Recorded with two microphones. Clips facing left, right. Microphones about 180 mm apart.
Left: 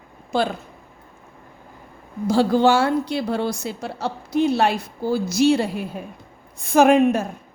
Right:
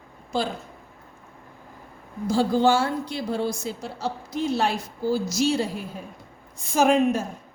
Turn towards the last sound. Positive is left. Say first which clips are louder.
# left 5 dB
turn(degrees=60)  # may be behind; listen again after turning